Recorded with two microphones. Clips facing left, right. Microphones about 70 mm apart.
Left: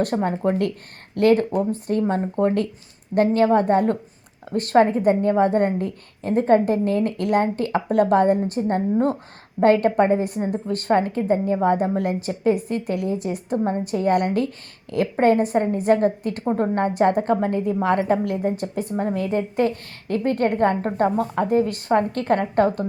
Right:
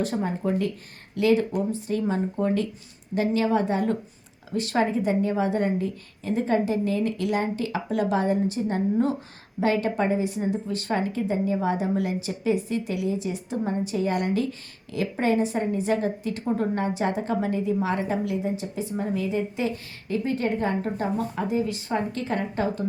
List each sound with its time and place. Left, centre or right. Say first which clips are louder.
0.0 s a woman's voice: left 5 dB; left